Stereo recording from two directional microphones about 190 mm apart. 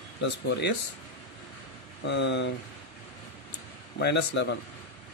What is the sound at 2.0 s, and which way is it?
Speech, 65° left (ahead or behind).